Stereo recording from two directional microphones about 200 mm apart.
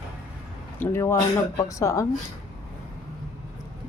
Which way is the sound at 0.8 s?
15° left (ahead or behind).